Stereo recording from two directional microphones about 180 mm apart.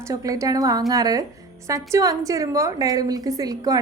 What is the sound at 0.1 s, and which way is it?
A woman's voice, 20° right (ahead or behind).